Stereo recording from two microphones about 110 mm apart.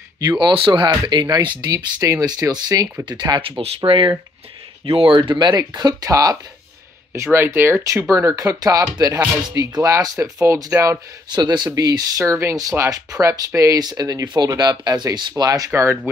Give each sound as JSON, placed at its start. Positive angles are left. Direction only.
{"t": 0.2, "sound": "speech", "side_deg": -40}
{"t": 2.0, "sound": "speech", "side_deg": -30}
{"t": 7.3, "sound": "speech", "side_deg": -20}